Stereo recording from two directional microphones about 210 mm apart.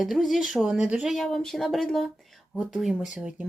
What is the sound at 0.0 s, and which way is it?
Speech, centre (ahead or behind).